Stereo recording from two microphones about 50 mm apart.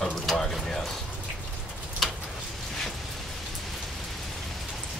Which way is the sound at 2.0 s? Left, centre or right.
Centre.